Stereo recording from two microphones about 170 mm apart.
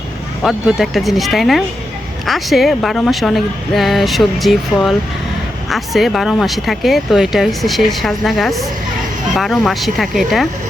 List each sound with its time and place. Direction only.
0.4 s speech: centre (ahead or behind)